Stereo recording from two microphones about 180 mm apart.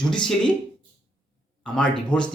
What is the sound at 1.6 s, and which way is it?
Speech, 5° left (ahead or behind).